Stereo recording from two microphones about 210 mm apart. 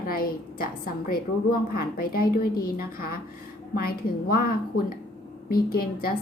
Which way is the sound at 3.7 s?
45° left (ahead or behind).